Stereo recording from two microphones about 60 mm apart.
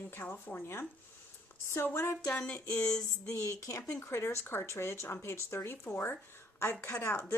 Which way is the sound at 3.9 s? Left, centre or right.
Left.